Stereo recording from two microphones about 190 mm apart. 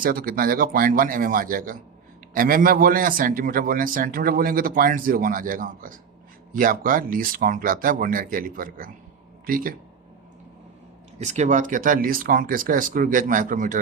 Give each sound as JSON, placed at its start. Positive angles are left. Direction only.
{"t": 0.0, "sound": "speech", "side_deg": -50}
{"t": 11.2, "sound": "speech", "side_deg": -40}